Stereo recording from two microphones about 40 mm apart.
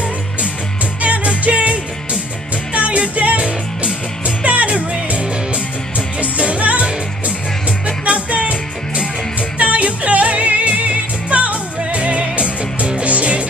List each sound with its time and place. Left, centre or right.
1.0 s music: right